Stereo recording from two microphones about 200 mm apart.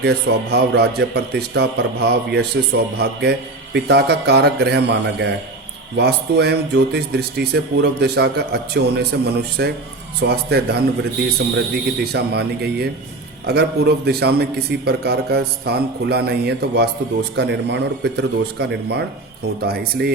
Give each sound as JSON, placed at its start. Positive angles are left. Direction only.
{"t": 0.0, "sound": "a man's voice", "side_deg": -55}
{"t": 12.1, "sound": "a man's voice", "side_deg": -55}